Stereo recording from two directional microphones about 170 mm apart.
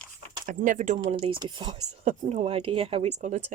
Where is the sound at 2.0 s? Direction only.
35° right (ahead or behind).